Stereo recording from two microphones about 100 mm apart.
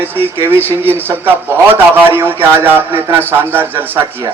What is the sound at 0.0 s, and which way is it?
A man's voice, 20° right (ahead or behind).